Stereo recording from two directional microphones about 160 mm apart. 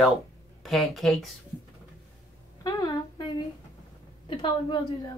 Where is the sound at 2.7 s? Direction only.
25° left (ahead or behind).